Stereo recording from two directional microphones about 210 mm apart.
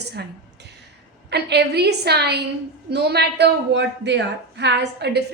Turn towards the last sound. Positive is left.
turn(degrees=-55)  # may be behind; listen again after turning